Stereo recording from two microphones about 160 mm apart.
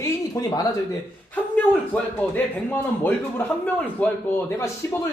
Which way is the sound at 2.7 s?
10° left (ahead or behind).